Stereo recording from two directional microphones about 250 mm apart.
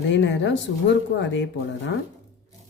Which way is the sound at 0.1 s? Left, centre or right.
Left.